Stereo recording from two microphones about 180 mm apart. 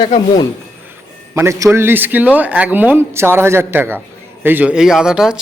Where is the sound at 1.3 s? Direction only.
15° right (ahead or behind).